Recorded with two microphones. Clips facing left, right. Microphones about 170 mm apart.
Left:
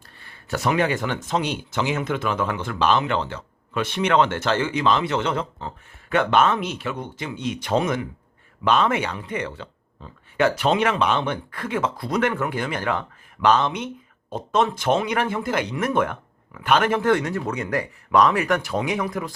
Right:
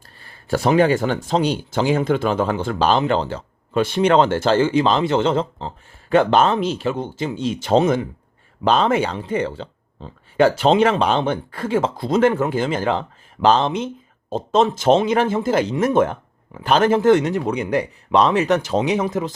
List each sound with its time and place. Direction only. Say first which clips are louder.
0.2 s speech: right 6 dB; 35° right (ahead or behind)